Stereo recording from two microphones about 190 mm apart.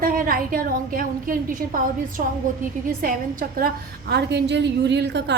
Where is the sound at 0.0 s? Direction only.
50° right (ahead or behind).